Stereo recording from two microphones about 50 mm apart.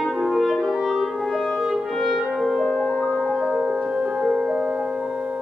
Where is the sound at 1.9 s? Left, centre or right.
Centre.